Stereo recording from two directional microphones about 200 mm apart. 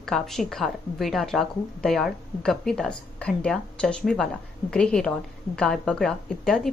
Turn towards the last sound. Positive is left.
turn(degrees=0)  # may be behind; listen again after turning